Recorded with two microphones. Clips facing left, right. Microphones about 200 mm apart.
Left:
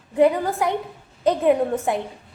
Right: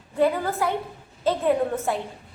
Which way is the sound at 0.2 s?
20° left (ahead or behind).